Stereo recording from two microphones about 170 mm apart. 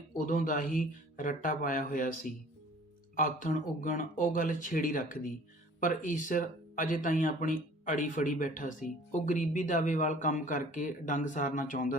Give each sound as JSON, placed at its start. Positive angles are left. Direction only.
{"t": 0.2, "sound": "speech", "side_deg": 50}
{"t": 3.2, "sound": "speech", "side_deg": 50}